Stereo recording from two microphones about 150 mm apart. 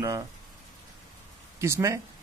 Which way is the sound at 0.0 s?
20° right (ahead or behind).